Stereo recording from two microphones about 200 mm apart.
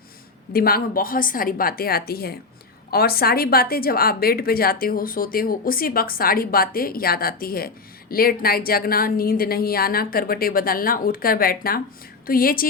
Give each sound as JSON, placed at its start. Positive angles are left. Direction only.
{"t": 0.5, "sound": "a woman's voice", "side_deg": 50}